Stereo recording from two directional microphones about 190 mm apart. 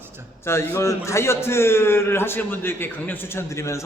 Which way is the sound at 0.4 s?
10° left (ahead or behind).